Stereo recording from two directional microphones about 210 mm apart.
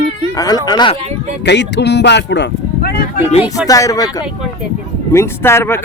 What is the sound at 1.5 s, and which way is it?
Speech, 55° left (ahead or behind).